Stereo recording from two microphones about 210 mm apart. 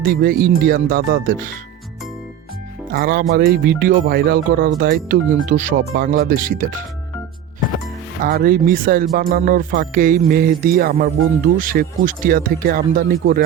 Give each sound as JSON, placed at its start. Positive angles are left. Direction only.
{"t": 0.1, "sound": "speech", "side_deg": -45}
{"t": 2.9, "sound": "speech", "side_deg": -45}
{"t": 8.2, "sound": "speech", "side_deg": -45}